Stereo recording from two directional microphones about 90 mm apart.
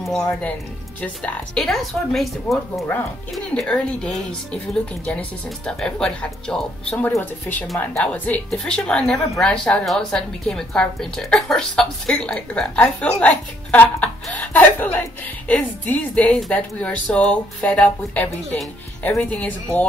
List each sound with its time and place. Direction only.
0.0 s music: 5° left (ahead or behind)
1.0 s a woman's voice: 15° left (ahead or behind)
1.6 s a woman's voice: centre (ahead or behind)
5.7 s a woman's voice: 10° left (ahead or behind)